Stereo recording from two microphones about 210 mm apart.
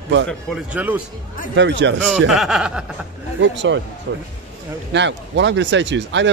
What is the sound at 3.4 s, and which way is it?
Speech, 60° right (ahead or behind).